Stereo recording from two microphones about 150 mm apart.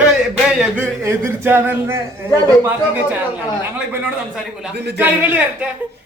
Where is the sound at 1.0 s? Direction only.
15° right (ahead or behind).